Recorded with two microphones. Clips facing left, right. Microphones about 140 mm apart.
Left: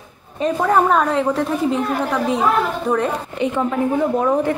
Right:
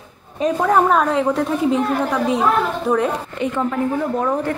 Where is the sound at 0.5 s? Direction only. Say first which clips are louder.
Even; centre (ahead or behind).